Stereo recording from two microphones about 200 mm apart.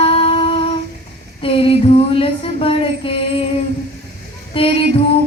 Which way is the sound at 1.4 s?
25° left (ahead or behind).